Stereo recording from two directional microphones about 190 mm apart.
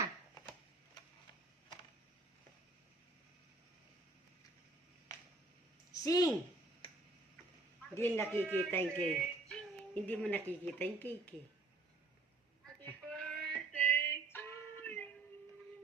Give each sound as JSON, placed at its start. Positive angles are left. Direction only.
{"t": 5.9, "sound": "a sound", "side_deg": 20}
{"t": 7.9, "sound": "a man's voice", "side_deg": 10}
{"t": 12.8, "sound": "child singing", "side_deg": 5}
{"t": 13.7, "sound": "female singing", "side_deg": 10}